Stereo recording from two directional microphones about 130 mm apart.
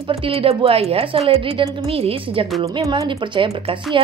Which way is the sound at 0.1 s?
45° right (ahead or behind).